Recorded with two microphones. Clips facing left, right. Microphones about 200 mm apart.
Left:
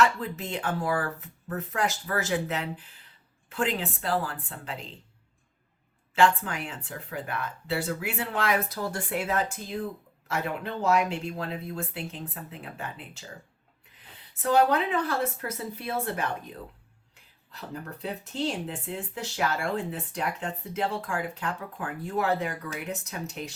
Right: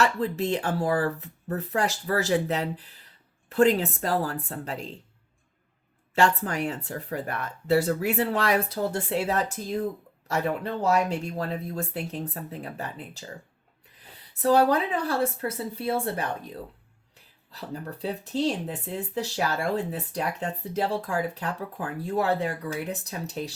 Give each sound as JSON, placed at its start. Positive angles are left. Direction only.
{"t": 0.0, "sound": "speech", "side_deg": -35}
{"t": 6.1, "sound": "speech", "side_deg": -40}
{"t": 10.8, "sound": "speech", "side_deg": -40}
{"t": 14.4, "sound": "speech", "side_deg": -35}
{"t": 18.0, "sound": "speech", "side_deg": -35}